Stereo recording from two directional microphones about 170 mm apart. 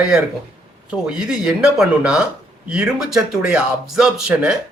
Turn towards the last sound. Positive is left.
turn(degrees=-5)  # may be behind; listen again after turning